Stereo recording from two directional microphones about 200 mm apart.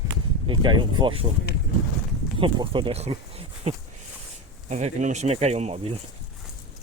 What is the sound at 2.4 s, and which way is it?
Speech, 25° right (ahead or behind).